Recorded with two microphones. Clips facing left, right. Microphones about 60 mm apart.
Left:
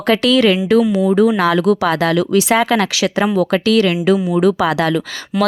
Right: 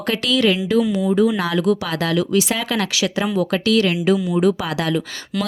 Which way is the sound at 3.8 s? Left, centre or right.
Left.